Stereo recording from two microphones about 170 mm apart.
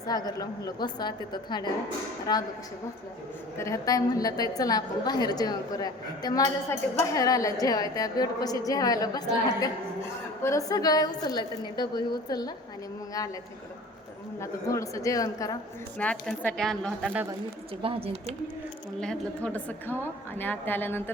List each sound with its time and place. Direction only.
0.0 s a woman's voice: 20° left (ahead or behind)
3.6 s a woman's voice: 20° left (ahead or behind)
14.4 s a woman's voice: 20° left (ahead or behind)
16.0 s speech: 10° left (ahead or behind)
17.8 s speech: 35° right (ahead or behind)
18.9 s a woman's voice: 5° left (ahead or behind)